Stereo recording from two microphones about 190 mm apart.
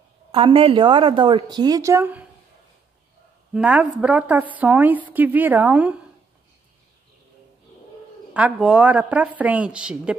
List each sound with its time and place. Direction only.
0.3 s a woman's voice: 30° right (ahead or behind); by 2.2 s 10° right (ahead or behind)
3.5 s a woman's voice: 5° right (ahead or behind)
8.3 s a woman's voice: 5° right (ahead or behind)